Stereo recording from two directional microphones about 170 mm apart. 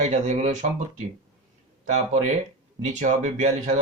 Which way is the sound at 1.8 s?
40° right (ahead or behind).